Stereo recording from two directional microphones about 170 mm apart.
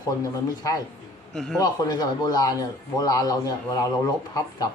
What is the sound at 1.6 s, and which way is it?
Speech, 25° left (ahead or behind).